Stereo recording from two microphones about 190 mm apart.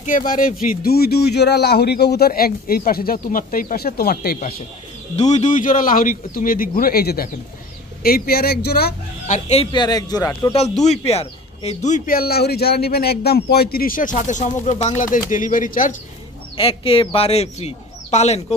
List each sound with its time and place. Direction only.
0.0 s speech: 45° left (ahead or behind)
9.3 s speech: 30° left (ahead or behind)
10.5 s speech: 35° left (ahead or behind)
16.5 s speech: 30° left (ahead or behind)